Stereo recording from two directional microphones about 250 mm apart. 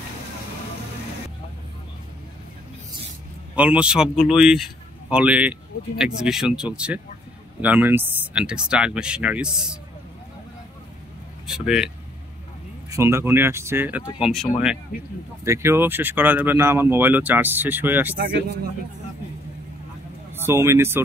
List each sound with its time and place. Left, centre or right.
3.5 s speech: centre
11.4 s speech: centre
12.9 s speech: centre
15.4 s speech: centre
20.3 s speech: centre